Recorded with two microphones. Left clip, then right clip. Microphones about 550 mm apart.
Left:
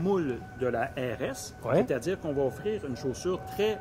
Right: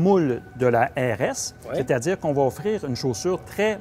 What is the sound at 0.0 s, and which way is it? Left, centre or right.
Speech, right.